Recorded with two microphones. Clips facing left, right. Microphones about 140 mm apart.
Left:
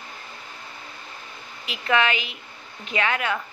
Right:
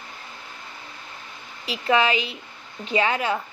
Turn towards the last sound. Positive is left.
turn(degrees=-30)  # may be behind; listen again after turning